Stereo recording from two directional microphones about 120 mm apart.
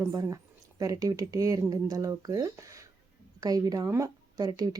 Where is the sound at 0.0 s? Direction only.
30° right (ahead or behind).